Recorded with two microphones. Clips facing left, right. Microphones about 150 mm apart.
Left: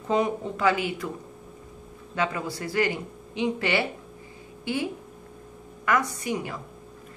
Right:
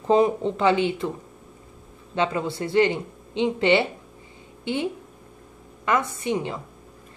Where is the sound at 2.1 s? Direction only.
25° right (ahead or behind).